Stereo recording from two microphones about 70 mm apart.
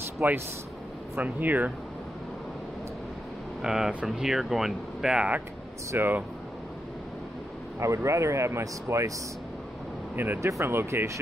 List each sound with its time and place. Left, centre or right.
0.2 s speech: right
3.6 s speech: centre
5.9 s speech: right
7.8 s speech: right
10.1 s speech: right